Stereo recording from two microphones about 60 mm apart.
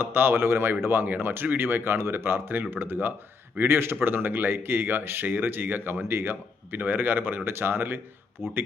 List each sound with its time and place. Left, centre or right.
0.0 s speech: right